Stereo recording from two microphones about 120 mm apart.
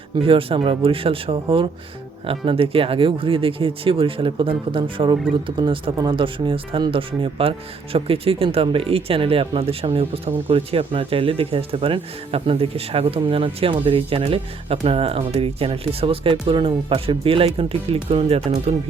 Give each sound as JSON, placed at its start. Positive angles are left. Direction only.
{"t": 0.2, "sound": "speech", "side_deg": -50}